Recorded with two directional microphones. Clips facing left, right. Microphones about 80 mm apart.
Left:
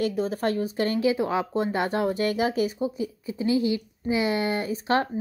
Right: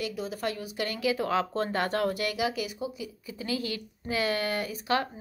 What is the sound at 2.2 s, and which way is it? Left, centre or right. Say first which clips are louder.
A woman's voice: left 6 dB; left.